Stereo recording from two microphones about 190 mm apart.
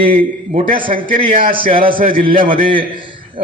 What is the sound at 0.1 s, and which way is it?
Speech, 45° right (ahead or behind).